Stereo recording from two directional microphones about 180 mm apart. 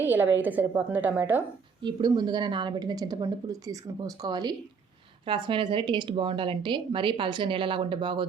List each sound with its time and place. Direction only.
0.0 s a woman's voice: 10° right (ahead or behind)
1.8 s a woman's voice: 25° right (ahead or behind)